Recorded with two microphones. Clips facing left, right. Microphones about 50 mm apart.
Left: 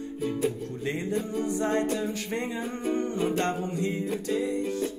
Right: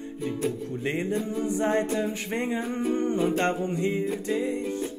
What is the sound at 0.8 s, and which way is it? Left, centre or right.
Music, right.